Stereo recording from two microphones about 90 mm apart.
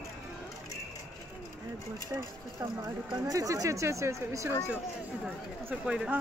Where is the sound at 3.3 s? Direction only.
40° right (ahead or behind).